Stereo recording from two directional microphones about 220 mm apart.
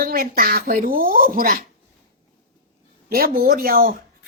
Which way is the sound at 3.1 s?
40° right (ahead or behind).